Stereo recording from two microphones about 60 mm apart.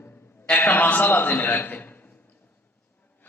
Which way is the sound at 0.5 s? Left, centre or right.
Left.